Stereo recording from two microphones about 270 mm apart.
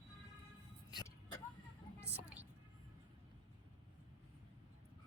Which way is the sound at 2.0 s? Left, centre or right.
Right.